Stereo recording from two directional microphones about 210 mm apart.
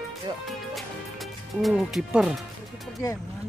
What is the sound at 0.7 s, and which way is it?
Music, centre (ahead or behind).